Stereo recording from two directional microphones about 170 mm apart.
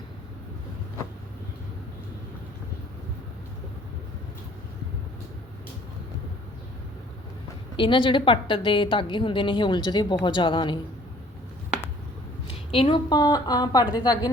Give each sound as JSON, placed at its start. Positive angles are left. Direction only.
{"t": 7.8, "sound": "a woman's voice", "side_deg": 30}
{"t": 12.7, "sound": "a woman's voice", "side_deg": 30}